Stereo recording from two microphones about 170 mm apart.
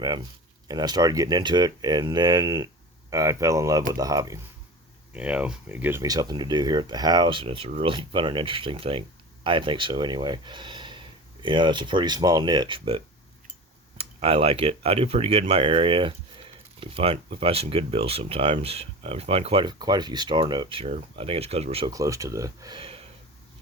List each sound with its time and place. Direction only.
0.7 s speech: 25° right (ahead or behind)
5.1 s speech: 5° right (ahead or behind); by 13.0 s 30° right (ahead or behind)
14.0 s speech: 35° right (ahead or behind)
21.8 s speech: 20° right (ahead or behind)
22.8 s a sound: 35° right (ahead or behind)